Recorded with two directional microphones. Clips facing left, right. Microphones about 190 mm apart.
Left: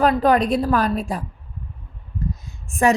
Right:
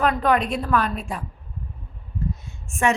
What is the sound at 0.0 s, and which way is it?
Speech, 35° left (ahead or behind).